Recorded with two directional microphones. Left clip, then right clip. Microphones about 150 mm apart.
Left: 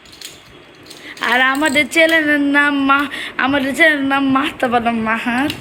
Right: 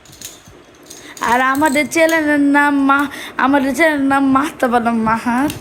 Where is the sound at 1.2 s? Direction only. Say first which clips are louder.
Right 1 dB; 25° right (ahead or behind).